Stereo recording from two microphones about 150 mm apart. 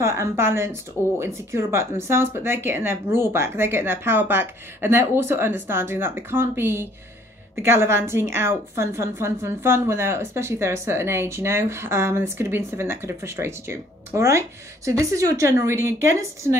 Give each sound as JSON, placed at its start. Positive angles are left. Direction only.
{"t": 0.0, "sound": "a woman's voice", "side_deg": -15}